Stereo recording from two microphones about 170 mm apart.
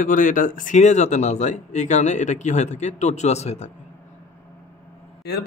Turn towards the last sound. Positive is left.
turn(degrees=75)  # may be behind; listen again after turning